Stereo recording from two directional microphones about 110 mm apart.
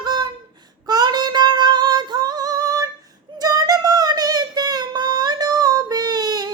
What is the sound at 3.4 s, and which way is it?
Child singing, 35° right (ahead or behind).